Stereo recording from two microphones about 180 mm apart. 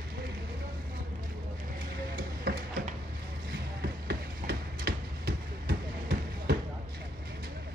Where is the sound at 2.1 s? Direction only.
60° right (ahead or behind).